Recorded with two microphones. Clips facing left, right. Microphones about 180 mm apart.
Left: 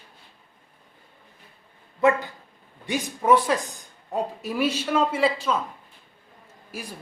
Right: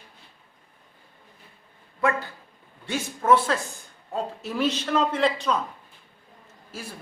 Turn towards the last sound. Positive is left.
turn(degrees=15)  # may be behind; listen again after turning